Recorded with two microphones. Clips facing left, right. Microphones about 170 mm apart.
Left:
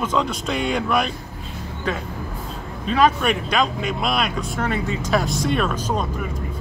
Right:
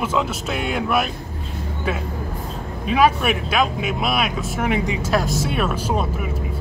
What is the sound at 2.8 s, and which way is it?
Speech, 10° right (ahead or behind).